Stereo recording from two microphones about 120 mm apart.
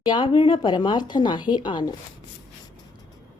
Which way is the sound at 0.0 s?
40° left (ahead or behind).